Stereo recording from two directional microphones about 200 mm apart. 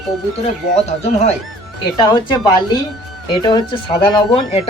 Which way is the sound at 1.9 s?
25° left (ahead or behind).